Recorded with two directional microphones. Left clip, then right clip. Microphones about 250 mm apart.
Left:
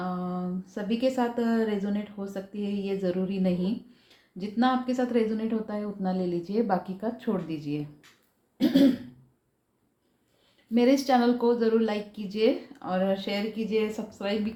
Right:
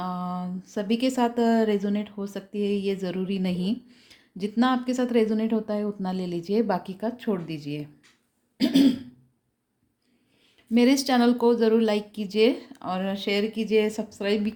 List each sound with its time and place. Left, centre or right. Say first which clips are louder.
0.0 s speech: right 2 dB; right
10.8 s speech: right 1 dB; right